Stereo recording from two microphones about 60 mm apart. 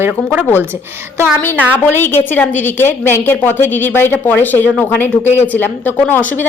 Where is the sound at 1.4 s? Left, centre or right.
Left.